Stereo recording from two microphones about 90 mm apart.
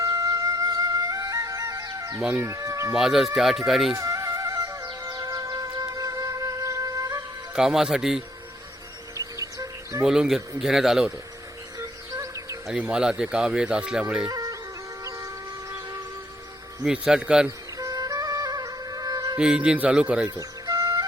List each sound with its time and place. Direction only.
0.0 s music: 40° right (ahead or behind)
2.3 s speech: 35° right (ahead or behind)
2.9 s a man's voice: 5° right (ahead or behind)
3.9 s music: 35° right (ahead or behind)
7.5 s a man's voice: 5° right (ahead or behind)
9.1 s bird: 35° right (ahead or behind)
10.0 s a man's voice: 5° right (ahead or behind)
11.8 s music: 35° right (ahead or behind)
12.7 s speech: 10° right (ahead or behind)
14.3 s music: 45° right (ahead or behind)
16.8 s speech: 10° right (ahead or behind)
17.7 s music: 45° right (ahead or behind)
19.4 s speech: 10° right (ahead or behind)
20.4 s music: 45° right (ahead or behind)